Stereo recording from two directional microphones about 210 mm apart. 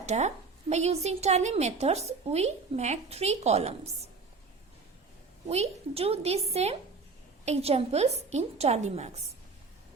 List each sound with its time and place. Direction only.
0.0 s a woman's voice: 30° right (ahead or behind)
5.5 s a woman's voice: 30° right (ahead or behind)